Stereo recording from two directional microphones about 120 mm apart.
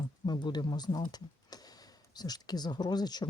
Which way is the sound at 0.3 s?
35° left (ahead or behind).